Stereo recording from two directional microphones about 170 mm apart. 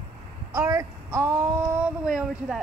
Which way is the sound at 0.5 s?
20° right (ahead or behind).